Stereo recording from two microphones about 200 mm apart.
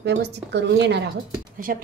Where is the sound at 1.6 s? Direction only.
45° right (ahead or behind).